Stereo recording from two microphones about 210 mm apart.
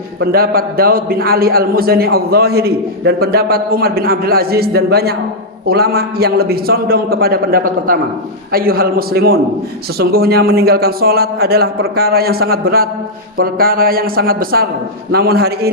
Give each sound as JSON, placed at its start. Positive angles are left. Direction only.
{"t": 0.2, "sound": "a man's voice", "side_deg": -45}